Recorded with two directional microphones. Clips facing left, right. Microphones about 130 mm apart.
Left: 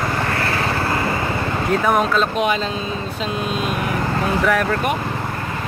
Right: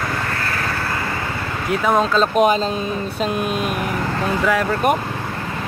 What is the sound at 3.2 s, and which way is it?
Speech, 55° right (ahead or behind).